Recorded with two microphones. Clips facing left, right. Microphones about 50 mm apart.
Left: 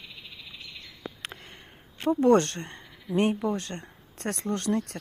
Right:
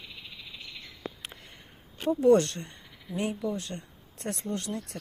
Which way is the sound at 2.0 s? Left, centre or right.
Left.